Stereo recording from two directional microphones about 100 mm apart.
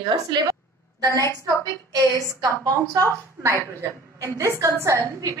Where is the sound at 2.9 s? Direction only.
30° right (ahead or behind).